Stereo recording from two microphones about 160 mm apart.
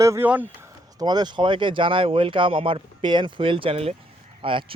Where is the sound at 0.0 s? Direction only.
15° right (ahead or behind).